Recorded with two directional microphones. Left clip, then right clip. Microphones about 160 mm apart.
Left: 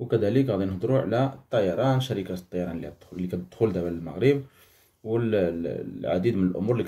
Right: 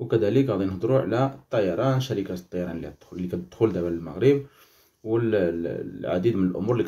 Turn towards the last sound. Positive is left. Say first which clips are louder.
# right 2 dB
turn(degrees=-5)  # may be behind; listen again after turning